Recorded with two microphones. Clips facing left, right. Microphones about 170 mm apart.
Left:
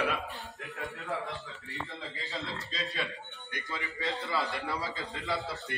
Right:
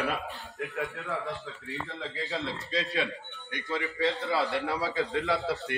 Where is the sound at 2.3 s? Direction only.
70° right (ahead or behind).